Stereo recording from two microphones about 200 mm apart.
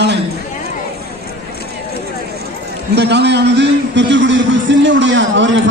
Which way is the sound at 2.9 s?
60° right (ahead or behind).